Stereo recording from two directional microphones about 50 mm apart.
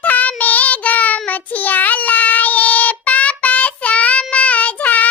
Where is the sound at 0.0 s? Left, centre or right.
Left.